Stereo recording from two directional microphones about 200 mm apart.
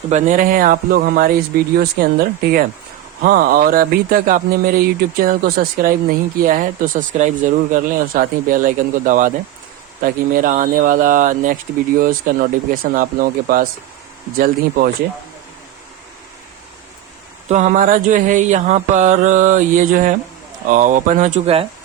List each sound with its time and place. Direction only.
0.1 s speech: 40° right (ahead or behind)
10.5 s mantra: 40° right (ahead or behind)
11.9 s speech: 45° right (ahead or behind)
17.5 s mantra: 40° right (ahead or behind)